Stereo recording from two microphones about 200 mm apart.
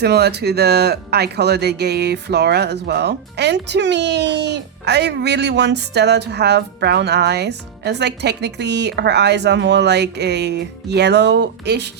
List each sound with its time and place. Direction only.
0.0 s speech: 55° right (ahead or behind)